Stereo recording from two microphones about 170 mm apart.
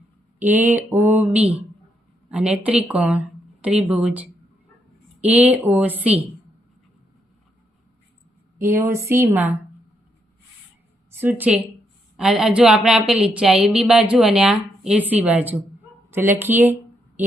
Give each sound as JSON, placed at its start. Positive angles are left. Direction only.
{"t": 0.3, "sound": "speech", "side_deg": -10}
{"t": 8.6, "sound": "speech", "side_deg": -15}
{"t": 11.2, "sound": "a woman's voice", "side_deg": -10}